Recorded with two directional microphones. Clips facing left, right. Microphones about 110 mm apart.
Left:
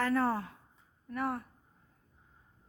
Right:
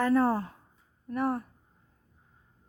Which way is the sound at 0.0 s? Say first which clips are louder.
Right 5 dB; 20° right (ahead or behind).